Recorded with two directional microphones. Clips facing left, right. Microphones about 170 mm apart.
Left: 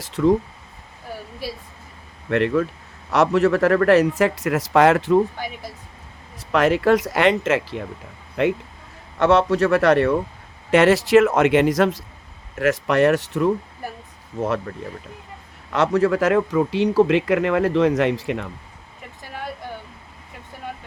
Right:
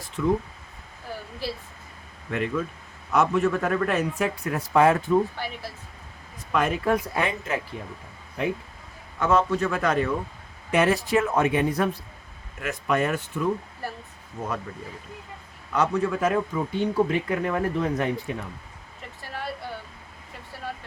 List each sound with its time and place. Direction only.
0.0 s speech: 80° left
2.3 s speech: 80° left
6.5 s speech: 80° left
8.4 s speech: 80° left
12.5 s speech: 80° left
14.7 s speech: 65° left (ahead or behind)
15.7 s speech: 80° left